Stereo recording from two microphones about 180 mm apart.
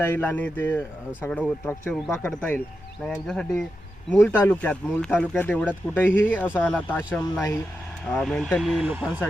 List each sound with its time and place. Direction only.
0.0 s speech: 10° left (ahead or behind); by 9.2 s 5° right (ahead or behind)